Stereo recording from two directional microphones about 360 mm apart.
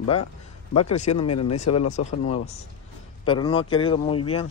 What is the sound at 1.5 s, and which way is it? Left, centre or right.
Speech, centre.